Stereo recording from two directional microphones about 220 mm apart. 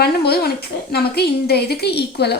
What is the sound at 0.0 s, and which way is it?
A woman's voice, 45° left (ahead or behind).